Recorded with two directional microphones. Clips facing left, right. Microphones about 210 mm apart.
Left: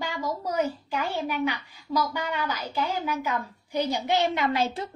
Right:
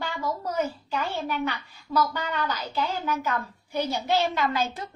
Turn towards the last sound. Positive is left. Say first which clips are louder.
# left 1 dB
turn(degrees=25)  # may be behind; listen again after turning